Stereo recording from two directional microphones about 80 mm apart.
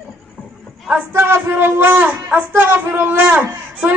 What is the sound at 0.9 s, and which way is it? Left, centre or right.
A woman's voice, right.